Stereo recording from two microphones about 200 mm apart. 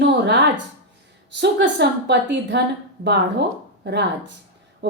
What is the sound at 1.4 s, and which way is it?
A woman's voice, 60° right (ahead or behind).